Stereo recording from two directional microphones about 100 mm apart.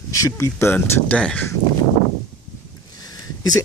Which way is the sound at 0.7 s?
15° left (ahead or behind).